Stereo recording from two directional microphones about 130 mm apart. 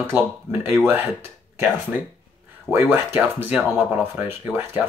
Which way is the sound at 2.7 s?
20° right (ahead or behind).